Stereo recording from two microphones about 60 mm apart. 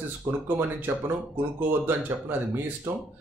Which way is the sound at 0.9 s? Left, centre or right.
Right.